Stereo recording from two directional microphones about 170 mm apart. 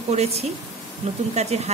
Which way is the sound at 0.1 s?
40° right (ahead or behind).